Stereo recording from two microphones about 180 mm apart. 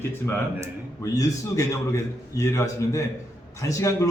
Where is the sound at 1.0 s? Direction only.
20° left (ahead or behind).